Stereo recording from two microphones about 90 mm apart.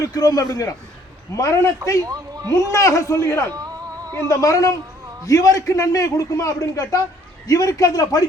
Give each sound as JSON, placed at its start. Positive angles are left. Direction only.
{"t": 0.0, "sound": "a man's voice", "side_deg": 40}
{"t": 2.0, "sound": "a man's voice", "side_deg": -45}
{"t": 2.6, "sound": "a man's voice", "side_deg": 35}
{"t": 3.5, "sound": "a sound", "side_deg": -45}
{"t": 4.3, "sound": "a man's voice", "side_deg": 35}